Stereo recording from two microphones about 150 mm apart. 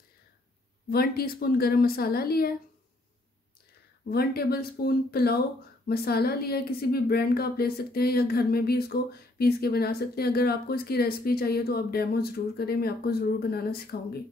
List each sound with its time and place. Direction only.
0.8 s speech: 85° left
4.1 s speech: 90° left